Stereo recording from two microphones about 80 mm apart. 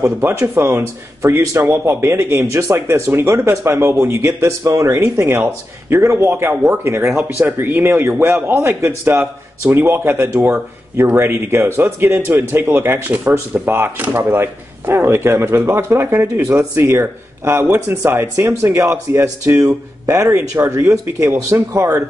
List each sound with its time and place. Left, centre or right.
0.0 s speech: right
1.6 s a man's voice: right